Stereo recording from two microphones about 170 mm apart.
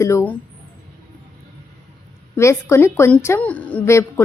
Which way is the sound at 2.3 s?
15° left (ahead or behind).